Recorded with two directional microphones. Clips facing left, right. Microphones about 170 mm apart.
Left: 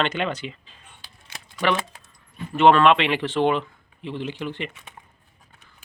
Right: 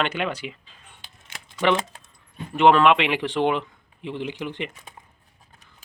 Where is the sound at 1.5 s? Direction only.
20° right (ahead or behind).